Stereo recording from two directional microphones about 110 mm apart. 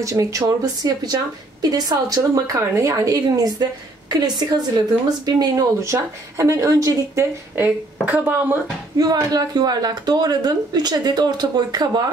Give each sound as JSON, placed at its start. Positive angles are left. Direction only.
{"t": 0.0, "sound": "a woman's voice", "side_deg": -30}
{"t": 7.5, "sound": "speech", "side_deg": -15}
{"t": 8.9, "sound": "a woman's voice", "side_deg": -35}